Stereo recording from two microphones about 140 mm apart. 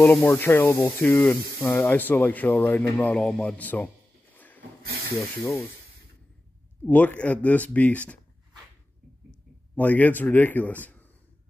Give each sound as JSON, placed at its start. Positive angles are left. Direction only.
{"t": 0.0, "sound": "speech", "side_deg": 15}
{"t": 6.8, "sound": "speech", "side_deg": 10}
{"t": 9.8, "sound": "speech", "side_deg": 10}